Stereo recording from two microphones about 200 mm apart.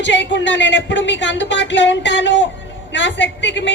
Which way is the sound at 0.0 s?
65° left (ahead or behind).